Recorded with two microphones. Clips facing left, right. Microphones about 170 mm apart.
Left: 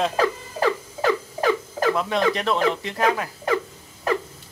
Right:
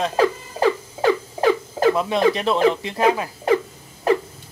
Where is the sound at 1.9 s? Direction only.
10° right (ahead or behind).